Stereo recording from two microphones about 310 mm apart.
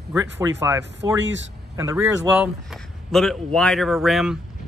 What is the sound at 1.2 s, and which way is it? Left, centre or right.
Speech, right.